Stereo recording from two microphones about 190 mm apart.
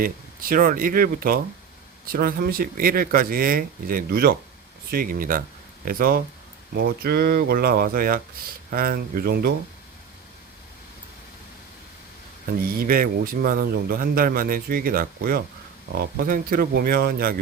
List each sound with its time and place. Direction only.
0.0 s a man's voice: 50° right (ahead or behind)
12.7 s a man's voice: 50° right (ahead or behind)